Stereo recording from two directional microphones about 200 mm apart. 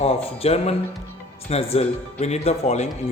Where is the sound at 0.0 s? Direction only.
30° left (ahead or behind).